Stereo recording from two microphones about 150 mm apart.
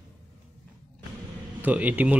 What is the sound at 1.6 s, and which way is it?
Speech, 10° right (ahead or behind).